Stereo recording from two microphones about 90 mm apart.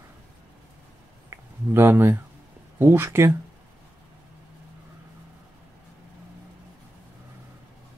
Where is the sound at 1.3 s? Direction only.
30° right (ahead or behind).